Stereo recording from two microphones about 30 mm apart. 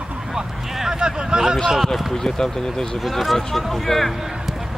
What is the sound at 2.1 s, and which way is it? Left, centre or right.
Speech, left.